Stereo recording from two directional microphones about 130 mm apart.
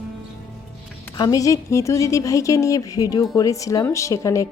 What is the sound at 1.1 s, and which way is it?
A woman's voice, 30° left (ahead or behind).